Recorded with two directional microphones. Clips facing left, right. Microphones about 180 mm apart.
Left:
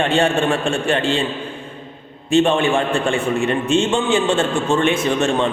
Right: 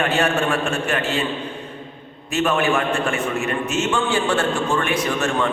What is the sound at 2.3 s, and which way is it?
Speech, 30° left (ahead or behind).